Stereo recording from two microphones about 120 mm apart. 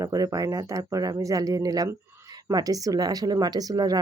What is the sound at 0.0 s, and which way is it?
A woman's voice, 30° right (ahead or behind).